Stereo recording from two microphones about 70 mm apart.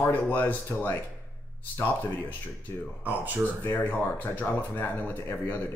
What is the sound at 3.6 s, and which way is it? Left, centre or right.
Speech, left.